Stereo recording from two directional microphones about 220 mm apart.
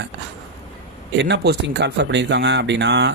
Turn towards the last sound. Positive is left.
turn(degrees=-50)  # may be behind; listen again after turning